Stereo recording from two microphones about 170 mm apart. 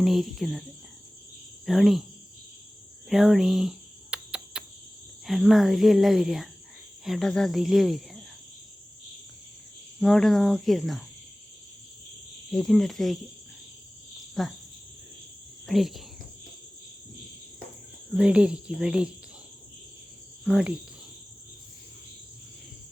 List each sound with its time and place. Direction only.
0.0 s speech: centre (ahead or behind)
1.6 s speech: centre (ahead or behind)
3.1 s a sound: centre (ahead or behind)
5.2 s speech: centre (ahead or behind)
10.0 s speech: centre (ahead or behind)
12.5 s speech: 5° left (ahead or behind)
14.4 s speech: centre (ahead or behind)
15.6 s speech: centre (ahead or behind)
18.1 s speech: 5° right (ahead or behind)
20.4 s speech: 5° right (ahead or behind)